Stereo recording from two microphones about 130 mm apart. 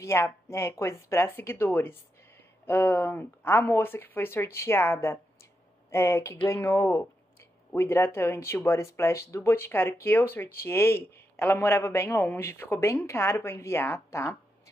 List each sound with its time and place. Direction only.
0.0 s speech: 20° left (ahead or behind)